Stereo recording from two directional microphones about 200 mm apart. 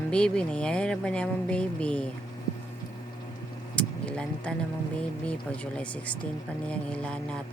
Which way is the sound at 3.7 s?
5° left (ahead or behind).